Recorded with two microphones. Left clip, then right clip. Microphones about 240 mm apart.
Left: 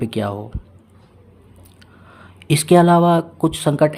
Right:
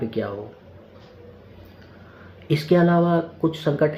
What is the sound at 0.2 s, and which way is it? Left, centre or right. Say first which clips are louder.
Speech: left 4 dB; left.